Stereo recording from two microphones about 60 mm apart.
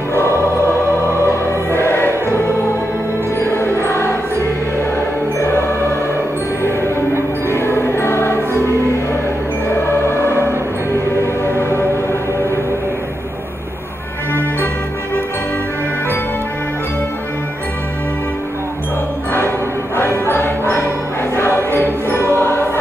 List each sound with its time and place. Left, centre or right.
0.1 s music: left
7.5 s music: left
20.0 s jingle bell: left
21.4 s music: left